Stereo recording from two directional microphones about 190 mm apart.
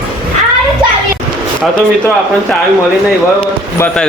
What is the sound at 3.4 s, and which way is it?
Basketball bounce, 5° left (ahead or behind).